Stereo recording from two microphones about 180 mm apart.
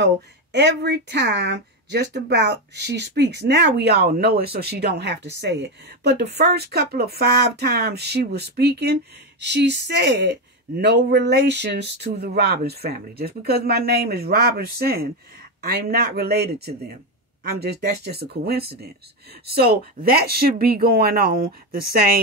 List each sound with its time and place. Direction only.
0.0 s speech: 75° right (ahead or behind); by 21.5 s 55° right (ahead or behind)